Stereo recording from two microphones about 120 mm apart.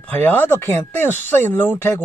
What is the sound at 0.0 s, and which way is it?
Speech, 15° left (ahead or behind).